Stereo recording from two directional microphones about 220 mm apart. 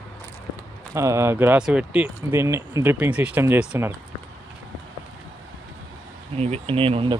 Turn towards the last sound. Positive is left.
turn(degrees=-25)  # may be behind; listen again after turning